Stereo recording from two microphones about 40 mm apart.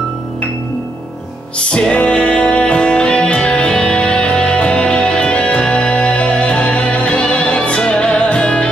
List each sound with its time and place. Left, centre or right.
1.6 s music: left